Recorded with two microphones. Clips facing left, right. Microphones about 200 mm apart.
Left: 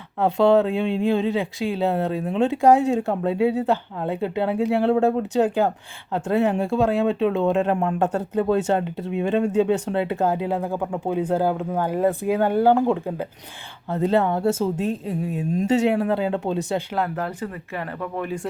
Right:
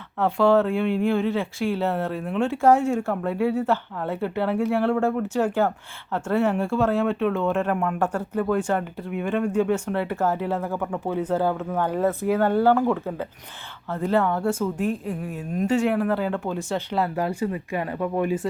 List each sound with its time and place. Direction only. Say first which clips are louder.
0.2 s a woman's voice: left 2 dB; 20° left (ahead or behind)
16.9 s speech: right 1 dB; 5° right (ahead or behind)